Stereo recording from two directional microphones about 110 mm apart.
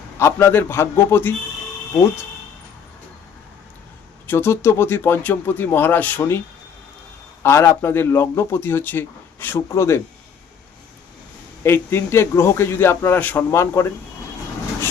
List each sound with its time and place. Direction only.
0.2 s speech: 25° left (ahead or behind)
4.3 s speech: 20° left (ahead or behind)
7.4 s a man's voice: 20° left (ahead or behind)
11.6 s speech: 20° left (ahead or behind)